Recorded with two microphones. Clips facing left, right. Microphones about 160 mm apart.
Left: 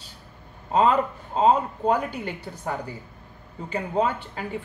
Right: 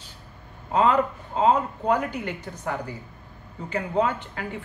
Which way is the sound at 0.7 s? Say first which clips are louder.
Even; 30° left (ahead or behind).